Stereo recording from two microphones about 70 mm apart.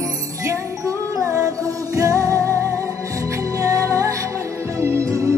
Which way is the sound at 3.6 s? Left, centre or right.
Right.